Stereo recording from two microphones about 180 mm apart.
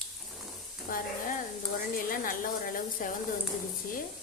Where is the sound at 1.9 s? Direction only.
50° left (ahead or behind).